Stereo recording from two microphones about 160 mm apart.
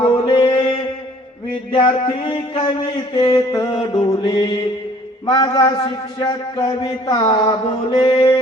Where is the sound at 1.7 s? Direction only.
30° left (ahead or behind).